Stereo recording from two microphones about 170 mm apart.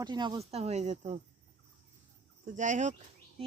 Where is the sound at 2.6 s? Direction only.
45° right (ahead or behind).